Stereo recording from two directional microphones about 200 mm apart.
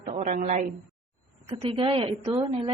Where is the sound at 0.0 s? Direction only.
35° right (ahead or behind).